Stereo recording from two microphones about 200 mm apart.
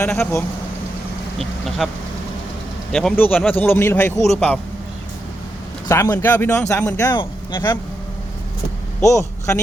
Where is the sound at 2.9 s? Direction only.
5° left (ahead or behind).